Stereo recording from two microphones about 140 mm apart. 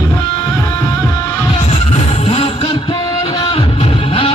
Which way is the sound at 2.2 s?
40° left (ahead or behind).